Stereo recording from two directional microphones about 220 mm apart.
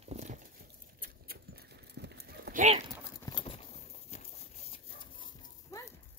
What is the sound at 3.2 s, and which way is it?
Clip-clop, 25° left (ahead or behind).